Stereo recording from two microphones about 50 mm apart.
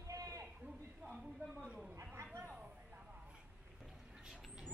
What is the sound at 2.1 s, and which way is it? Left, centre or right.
Chatter, right.